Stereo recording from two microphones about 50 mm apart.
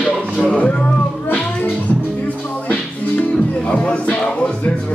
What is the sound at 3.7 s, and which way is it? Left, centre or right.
Music, left.